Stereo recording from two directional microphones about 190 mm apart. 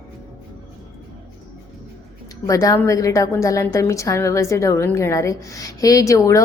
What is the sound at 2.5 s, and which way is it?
A woman's voice, 15° left (ahead or behind).